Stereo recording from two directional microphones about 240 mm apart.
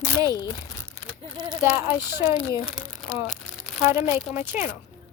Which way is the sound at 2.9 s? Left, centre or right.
Centre.